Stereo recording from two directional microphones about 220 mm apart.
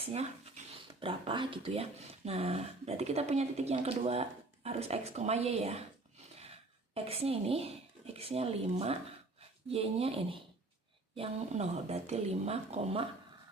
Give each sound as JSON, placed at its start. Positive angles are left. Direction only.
{"t": 0.0, "sound": "speech", "side_deg": -25}
{"t": 6.9, "sound": "speech", "side_deg": -25}